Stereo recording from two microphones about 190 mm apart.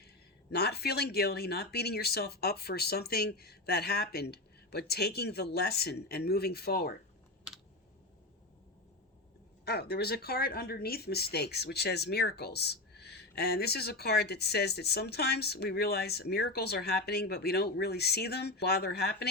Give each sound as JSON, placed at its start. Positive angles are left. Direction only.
{"t": 0.5, "sound": "speech", "side_deg": 60}
{"t": 9.6, "sound": "speech", "side_deg": 55}